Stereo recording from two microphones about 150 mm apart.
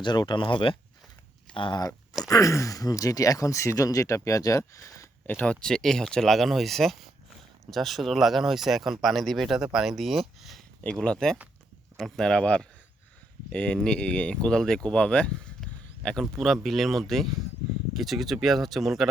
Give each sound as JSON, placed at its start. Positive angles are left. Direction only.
{"t": 0.0, "sound": "speech", "side_deg": 30}
{"t": 2.3, "sound": "speech", "side_deg": 20}